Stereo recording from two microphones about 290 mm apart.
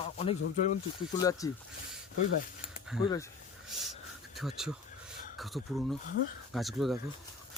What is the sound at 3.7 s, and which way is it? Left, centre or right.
Speech, centre.